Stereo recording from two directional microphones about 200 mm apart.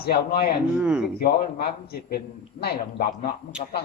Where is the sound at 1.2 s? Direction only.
50° left (ahead or behind).